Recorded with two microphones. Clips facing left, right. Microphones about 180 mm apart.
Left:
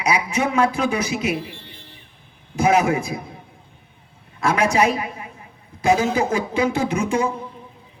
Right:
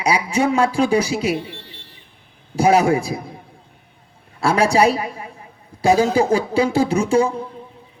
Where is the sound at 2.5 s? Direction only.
35° right (ahead or behind).